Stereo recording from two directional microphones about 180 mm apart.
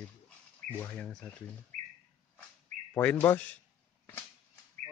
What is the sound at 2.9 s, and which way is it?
Speech, 10° left (ahead or behind).